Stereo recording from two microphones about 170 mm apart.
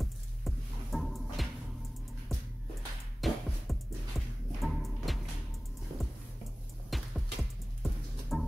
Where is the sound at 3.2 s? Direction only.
Centre (ahead or behind).